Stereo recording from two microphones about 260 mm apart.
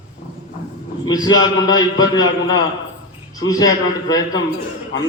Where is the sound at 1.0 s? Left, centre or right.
Centre.